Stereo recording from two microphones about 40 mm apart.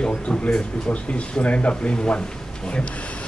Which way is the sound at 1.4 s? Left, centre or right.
Left.